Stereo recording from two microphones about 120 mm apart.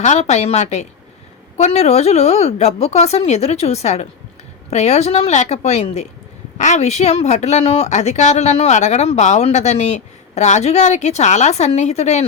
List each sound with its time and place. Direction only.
0.0 s a woman's voice: 75° left (ahead or behind)
6.6 s a woman's voice: 80° left